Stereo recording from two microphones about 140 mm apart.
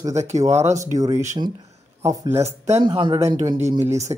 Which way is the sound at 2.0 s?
20° right (ahead or behind).